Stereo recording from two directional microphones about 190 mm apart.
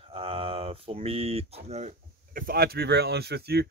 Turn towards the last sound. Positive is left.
turn(degrees=-55)  # may be behind; listen again after turning